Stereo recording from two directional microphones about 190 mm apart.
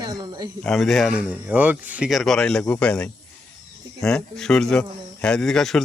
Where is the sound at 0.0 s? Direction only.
20° right (ahead or behind).